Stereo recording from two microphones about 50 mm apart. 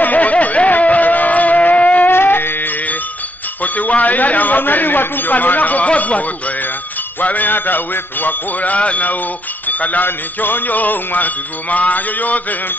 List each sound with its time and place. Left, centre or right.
0.0 s a sound: left
2.0 s music: left
3.6 s a man's voice: left